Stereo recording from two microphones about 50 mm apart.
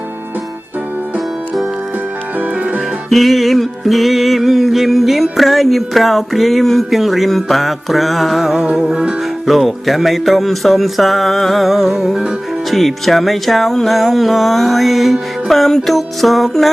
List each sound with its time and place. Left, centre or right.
3.1 s music: centre
9.5 s music: centre